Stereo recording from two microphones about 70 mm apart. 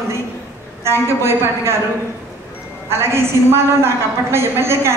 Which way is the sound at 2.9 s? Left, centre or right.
Right.